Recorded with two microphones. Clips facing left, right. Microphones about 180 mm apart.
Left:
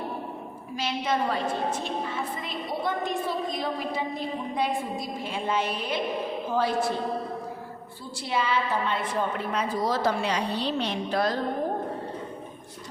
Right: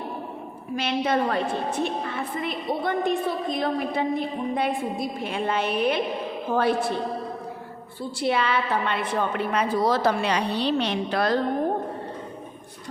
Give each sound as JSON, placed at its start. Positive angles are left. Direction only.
{"t": 0.8, "sound": "a woman's voice", "side_deg": -60}
{"t": 8.2, "sound": "a woman's voice", "side_deg": -65}